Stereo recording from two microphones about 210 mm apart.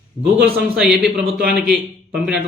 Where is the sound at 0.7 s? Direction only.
Centre (ahead or behind).